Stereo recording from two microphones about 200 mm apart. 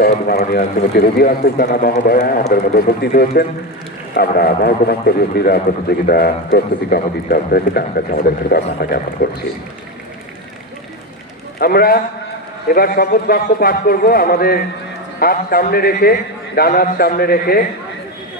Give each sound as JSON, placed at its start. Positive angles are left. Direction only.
{"t": 0.3, "sound": "speech", "side_deg": 50}
{"t": 11.6, "sound": "speech", "side_deg": 50}